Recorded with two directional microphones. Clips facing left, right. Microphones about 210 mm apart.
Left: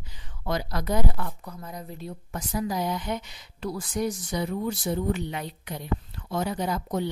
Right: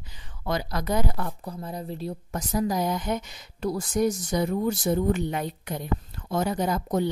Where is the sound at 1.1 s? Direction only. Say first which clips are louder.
Right 3 dB; 35° right (ahead or behind).